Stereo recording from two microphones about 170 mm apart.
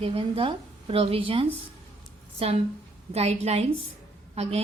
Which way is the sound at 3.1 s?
40° right (ahead or behind).